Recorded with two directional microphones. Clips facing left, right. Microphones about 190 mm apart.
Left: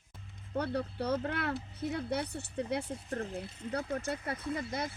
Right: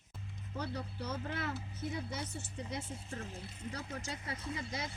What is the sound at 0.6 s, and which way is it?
Speech, 60° left (ahead or behind).